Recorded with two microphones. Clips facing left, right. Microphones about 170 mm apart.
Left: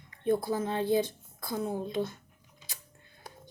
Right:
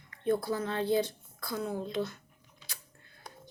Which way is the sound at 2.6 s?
20° left (ahead or behind).